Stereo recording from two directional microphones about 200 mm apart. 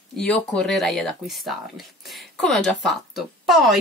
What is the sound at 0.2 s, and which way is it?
Speech, 5° left (ahead or behind).